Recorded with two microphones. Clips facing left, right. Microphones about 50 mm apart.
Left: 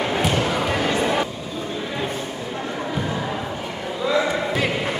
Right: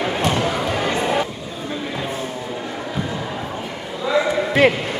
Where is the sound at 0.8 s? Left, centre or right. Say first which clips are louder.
Even; centre.